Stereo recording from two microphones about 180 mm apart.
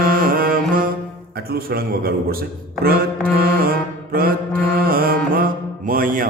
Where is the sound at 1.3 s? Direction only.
60° right (ahead or behind).